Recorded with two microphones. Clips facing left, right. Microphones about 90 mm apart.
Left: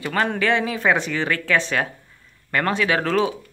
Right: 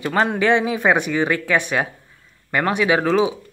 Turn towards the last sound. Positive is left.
turn(degrees=-15)  # may be behind; listen again after turning